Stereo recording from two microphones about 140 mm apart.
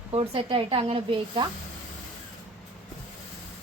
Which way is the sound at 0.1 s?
40° right (ahead or behind).